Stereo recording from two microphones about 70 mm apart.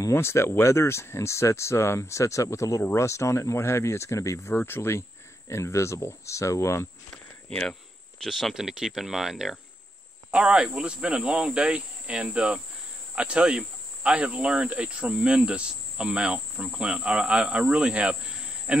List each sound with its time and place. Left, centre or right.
0.1 s speech: left
4.6 s speech: left
8.2 s speech: centre
10.3 s cricket: centre
13.1 s speech: centre